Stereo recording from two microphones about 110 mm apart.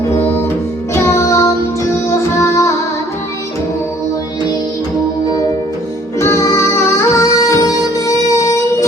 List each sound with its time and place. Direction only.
0.2 s music: 20° left (ahead or behind)
6.1 s music: 25° left (ahead or behind)